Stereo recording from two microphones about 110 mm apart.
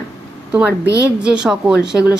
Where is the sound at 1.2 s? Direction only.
10° right (ahead or behind).